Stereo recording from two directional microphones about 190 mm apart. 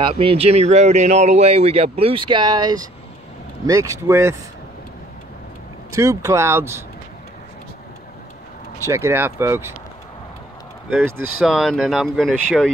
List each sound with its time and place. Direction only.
0.0 s a man's voice: 30° right (ahead or behind)
5.9 s speech: 15° right (ahead or behind)
8.8 s speech: 15° right (ahead or behind)
11.4 s speech: centre (ahead or behind)